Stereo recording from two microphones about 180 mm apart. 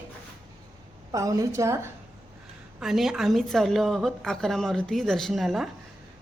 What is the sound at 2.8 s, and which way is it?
A woman's voice, centre (ahead or behind).